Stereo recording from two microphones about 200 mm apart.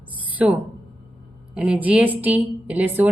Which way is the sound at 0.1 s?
10° right (ahead or behind).